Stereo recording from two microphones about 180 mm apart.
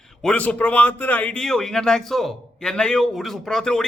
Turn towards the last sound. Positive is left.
turn(degrees=5)  # may be behind; listen again after turning